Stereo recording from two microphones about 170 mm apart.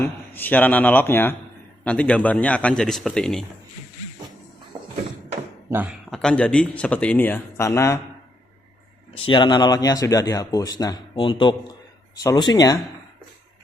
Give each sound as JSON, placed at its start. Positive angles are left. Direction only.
{"t": 0.0, "sound": "speech", "side_deg": 10}
{"t": 6.1, "sound": "speech", "side_deg": 5}
{"t": 9.2, "sound": "speech", "side_deg": 25}